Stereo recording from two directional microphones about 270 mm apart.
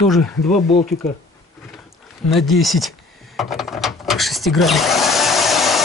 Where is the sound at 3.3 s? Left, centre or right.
Centre.